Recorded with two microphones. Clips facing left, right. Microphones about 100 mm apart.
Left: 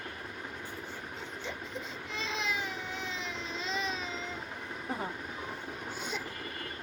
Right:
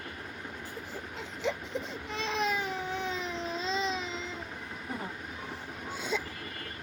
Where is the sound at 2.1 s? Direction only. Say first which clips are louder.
Right 5 dB; 55° right (ahead or behind).